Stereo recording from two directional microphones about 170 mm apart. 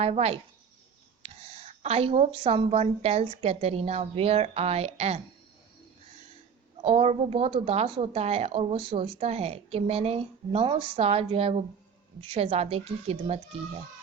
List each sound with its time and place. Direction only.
0.0 s a woman's voice: 35° right (ahead or behind)
6.8 s a woman's voice: 35° right (ahead or behind)